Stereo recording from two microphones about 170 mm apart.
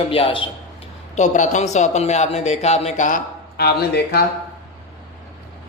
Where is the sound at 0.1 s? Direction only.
30° left (ahead or behind).